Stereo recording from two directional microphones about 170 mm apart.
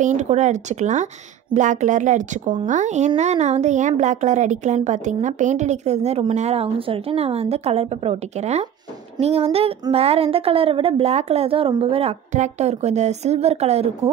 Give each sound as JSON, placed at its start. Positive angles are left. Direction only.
{"t": 0.0, "sound": "a woman's voice", "side_deg": -45}